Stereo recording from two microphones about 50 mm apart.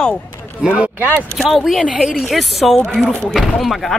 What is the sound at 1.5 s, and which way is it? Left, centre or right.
Speech, centre.